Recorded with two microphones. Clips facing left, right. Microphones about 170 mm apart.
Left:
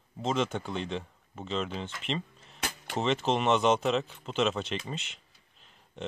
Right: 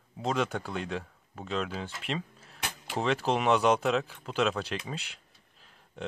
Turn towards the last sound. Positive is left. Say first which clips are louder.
# even
turn(degrees=0)  # may be behind; listen again after turning